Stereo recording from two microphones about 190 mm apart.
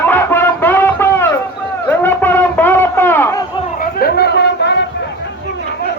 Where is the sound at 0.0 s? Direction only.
10° left (ahead or behind).